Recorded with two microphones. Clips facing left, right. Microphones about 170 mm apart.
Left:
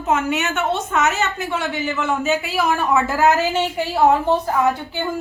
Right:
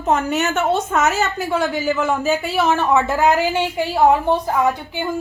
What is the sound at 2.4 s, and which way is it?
A woman's voice, 25° right (ahead or behind).